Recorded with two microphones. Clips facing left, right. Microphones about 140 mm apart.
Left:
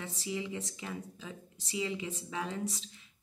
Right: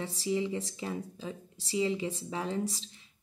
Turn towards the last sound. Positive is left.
turn(degrees=-30)  # may be behind; listen again after turning